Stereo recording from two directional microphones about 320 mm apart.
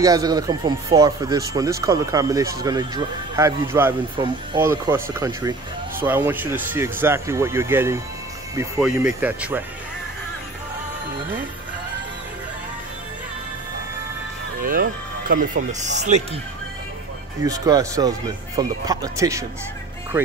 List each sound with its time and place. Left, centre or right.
0.0 s speech: centre
14.6 s speech: right
17.5 s speech: centre